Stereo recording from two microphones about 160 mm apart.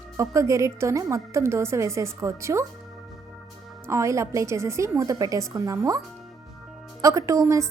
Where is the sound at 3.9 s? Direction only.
20° right (ahead or behind).